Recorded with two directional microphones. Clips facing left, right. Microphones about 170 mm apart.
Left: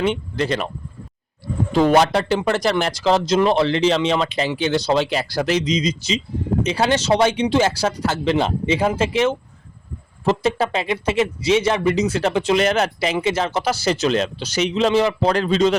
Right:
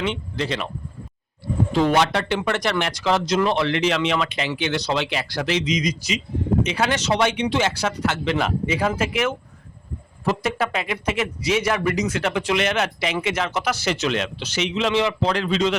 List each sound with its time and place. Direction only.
0.0 s speech: 45° left (ahead or behind)
1.7 s speech: 45° left (ahead or behind)